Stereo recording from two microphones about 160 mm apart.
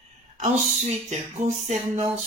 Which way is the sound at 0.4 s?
45° right (ahead or behind).